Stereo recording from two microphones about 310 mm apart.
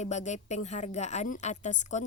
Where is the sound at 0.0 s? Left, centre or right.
Left.